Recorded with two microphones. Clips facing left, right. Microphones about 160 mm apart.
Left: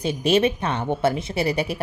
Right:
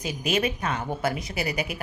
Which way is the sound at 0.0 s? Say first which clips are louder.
Left 7 dB; 30° left (ahead or behind).